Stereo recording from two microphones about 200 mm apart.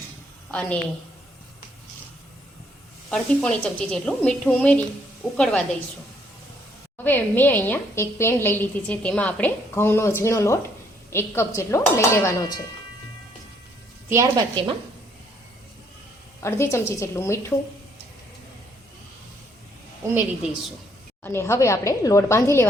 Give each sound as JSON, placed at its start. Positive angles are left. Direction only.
{"t": 3.1, "sound": "a woman's voice", "side_deg": 5}
{"t": 7.0, "sound": "a woman's voice", "side_deg": 10}
{"t": 14.1, "sound": "a woman's voice", "side_deg": -15}
{"t": 14.5, "sound": "speech", "side_deg": -30}
{"t": 16.4, "sound": "a woman's voice", "side_deg": 15}
{"t": 20.4, "sound": "a woman's voice", "side_deg": -5}
{"t": 21.2, "sound": "a woman's voice", "side_deg": 15}